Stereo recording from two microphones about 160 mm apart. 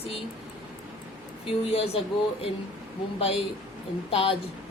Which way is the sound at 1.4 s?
35° left (ahead or behind).